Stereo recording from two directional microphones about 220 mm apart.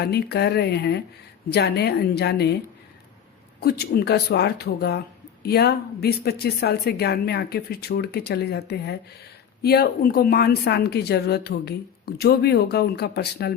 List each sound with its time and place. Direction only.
0.0 s speech: 50° left (ahead or behind)
3.6 s speech: 45° left (ahead or behind)